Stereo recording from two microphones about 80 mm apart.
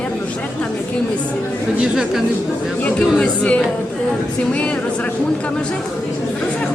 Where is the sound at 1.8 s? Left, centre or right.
Centre.